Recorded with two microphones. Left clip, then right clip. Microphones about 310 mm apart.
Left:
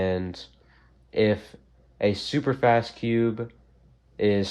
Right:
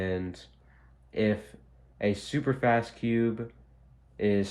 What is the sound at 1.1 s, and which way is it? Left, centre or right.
Speech, left.